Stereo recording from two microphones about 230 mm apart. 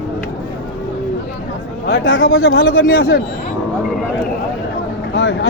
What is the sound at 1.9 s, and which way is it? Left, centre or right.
Speech, left.